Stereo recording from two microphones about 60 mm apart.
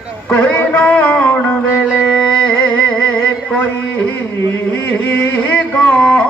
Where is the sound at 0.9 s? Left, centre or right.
Left.